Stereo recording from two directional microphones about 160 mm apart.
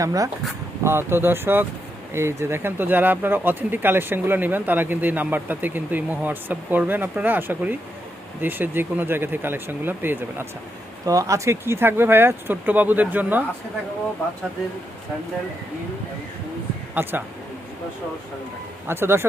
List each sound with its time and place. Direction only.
0.0 s speech: 20° right (ahead or behind)
16.9 s speech: 10° right (ahead or behind)
18.9 s speech: 15° right (ahead or behind)